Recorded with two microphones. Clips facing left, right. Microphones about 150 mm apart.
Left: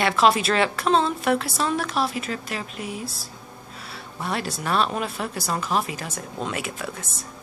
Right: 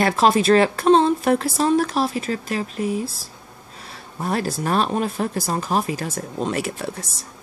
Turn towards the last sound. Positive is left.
turn(degrees=-40)  # may be behind; listen again after turning